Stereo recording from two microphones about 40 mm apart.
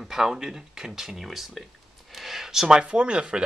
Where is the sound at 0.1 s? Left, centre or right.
Centre.